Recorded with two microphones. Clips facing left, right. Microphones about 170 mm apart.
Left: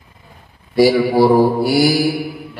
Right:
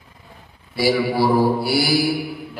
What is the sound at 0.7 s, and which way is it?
Mantra, 45° left (ahead or behind).